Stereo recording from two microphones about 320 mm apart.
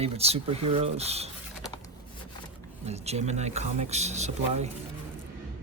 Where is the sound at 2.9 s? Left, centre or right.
Centre.